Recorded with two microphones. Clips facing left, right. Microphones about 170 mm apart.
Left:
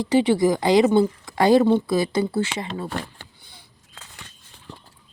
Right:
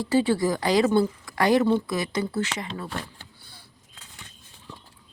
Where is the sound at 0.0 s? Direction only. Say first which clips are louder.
Left 4 dB; 20° left (ahead or behind).